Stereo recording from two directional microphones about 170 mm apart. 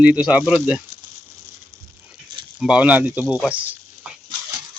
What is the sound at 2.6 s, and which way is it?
Speech, 5° right (ahead or behind).